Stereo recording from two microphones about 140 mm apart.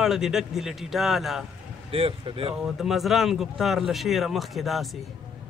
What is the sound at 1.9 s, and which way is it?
Speech, 40° right (ahead or behind).